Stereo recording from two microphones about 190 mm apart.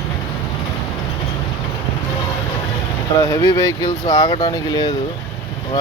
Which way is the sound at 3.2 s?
15° left (ahead or behind).